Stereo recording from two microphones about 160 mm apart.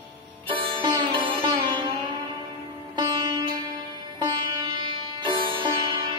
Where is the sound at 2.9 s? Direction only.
25° right (ahead or behind).